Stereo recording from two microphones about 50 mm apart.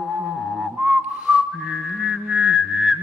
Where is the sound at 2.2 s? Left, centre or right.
Right.